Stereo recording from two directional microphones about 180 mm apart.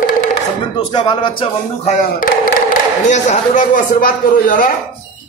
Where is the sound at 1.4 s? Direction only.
40° left (ahead or behind).